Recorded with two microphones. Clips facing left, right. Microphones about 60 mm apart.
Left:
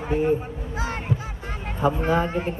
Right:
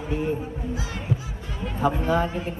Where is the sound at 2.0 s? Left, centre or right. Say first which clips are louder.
Left 1 dB; left.